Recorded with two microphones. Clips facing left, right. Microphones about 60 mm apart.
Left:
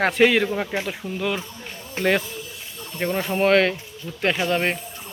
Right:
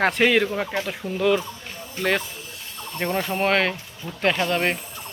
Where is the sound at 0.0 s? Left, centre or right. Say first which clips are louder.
Left 1 dB; centre.